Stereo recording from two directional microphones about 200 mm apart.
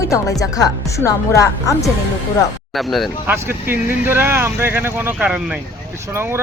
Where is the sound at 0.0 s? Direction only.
15° left (ahead or behind).